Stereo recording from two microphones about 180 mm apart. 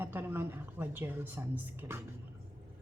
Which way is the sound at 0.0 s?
10° right (ahead or behind).